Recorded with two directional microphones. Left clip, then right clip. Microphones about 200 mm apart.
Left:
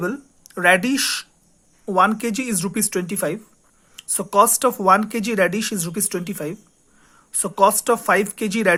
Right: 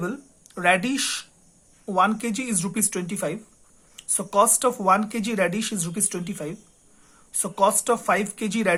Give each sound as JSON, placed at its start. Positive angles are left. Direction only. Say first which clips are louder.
{"t": 0.0, "sound": "speech", "louder": "left 5 dB", "side_deg": 25}